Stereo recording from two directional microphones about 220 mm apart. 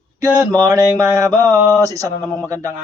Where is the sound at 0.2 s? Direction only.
15° right (ahead or behind).